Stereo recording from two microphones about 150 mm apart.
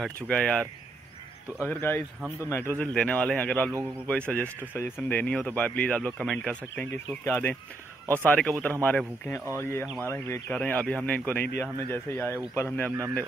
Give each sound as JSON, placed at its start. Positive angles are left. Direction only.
{"t": 0.0, "sound": "speech", "side_deg": 5}